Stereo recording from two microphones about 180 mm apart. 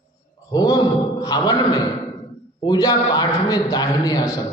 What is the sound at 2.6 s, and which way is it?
A man's voice, 20° left (ahead or behind).